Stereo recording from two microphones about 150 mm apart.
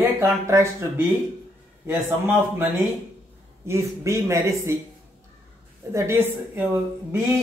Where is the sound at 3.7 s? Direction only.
20° right (ahead or behind).